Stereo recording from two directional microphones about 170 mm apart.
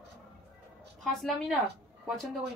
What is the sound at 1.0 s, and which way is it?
Speech, centre (ahead or behind).